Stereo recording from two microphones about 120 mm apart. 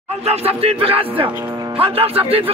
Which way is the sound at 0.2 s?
60° right (ahead or behind).